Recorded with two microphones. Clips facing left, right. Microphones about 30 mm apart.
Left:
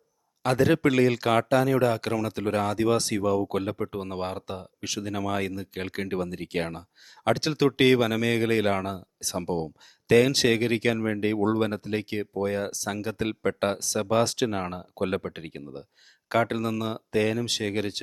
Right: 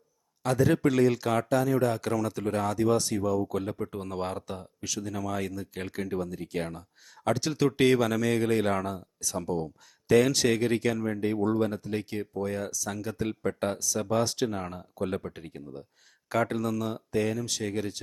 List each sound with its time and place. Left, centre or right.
0.4 s speech: left
3.8 s speech: left
5.9 s speech: left
6.1 s speech: left
9.2 s speech: left
11.9 s speech: left
14.5 s speech: left
15.0 s speech: left